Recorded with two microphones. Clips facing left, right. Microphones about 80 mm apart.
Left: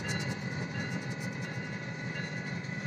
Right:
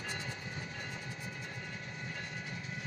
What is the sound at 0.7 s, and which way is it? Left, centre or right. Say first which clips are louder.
Train: left 6 dB; left.